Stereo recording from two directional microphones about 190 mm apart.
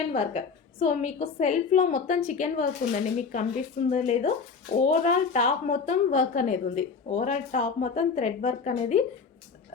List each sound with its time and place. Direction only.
0.1 s a woman's voice: 30° left (ahead or behind)